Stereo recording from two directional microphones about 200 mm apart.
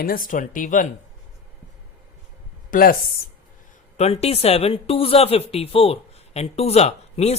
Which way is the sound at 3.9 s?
30° left (ahead or behind).